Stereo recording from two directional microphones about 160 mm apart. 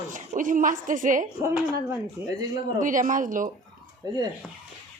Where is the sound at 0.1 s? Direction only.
55° right (ahead or behind).